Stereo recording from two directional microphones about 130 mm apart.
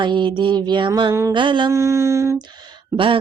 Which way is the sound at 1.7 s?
20° right (ahead or behind).